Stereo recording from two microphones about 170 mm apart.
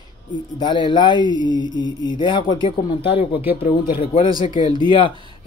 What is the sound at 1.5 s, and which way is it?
Mantra, 90° left.